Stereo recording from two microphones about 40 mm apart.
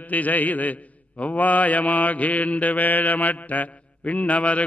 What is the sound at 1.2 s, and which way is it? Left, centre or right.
Mantra, left.